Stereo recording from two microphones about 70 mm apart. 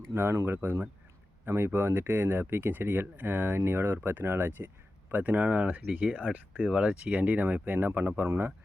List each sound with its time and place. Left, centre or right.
0.1 s speech: right